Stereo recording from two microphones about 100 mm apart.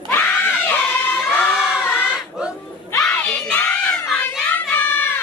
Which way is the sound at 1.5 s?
5° right (ahead or behind).